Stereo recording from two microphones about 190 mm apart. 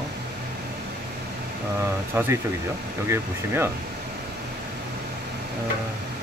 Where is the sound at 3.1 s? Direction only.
10° right (ahead or behind).